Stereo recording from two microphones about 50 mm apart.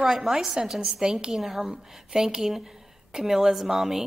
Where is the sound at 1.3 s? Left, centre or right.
Centre.